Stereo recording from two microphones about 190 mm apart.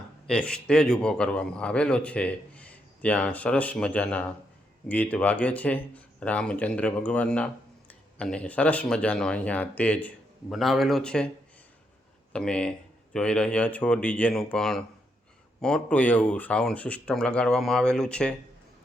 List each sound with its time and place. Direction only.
0.3 s speech: 5° left (ahead or behind)
12.3 s speech: 5° left (ahead or behind)